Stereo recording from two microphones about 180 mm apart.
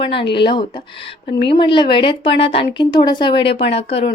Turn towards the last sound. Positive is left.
turn(degrees=35)  # may be behind; listen again after turning